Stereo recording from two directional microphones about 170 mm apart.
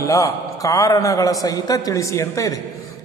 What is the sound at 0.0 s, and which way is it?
A man's voice, 20° left (ahead or behind).